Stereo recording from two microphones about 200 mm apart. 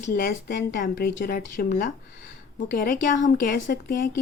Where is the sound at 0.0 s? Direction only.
45° left (ahead or behind).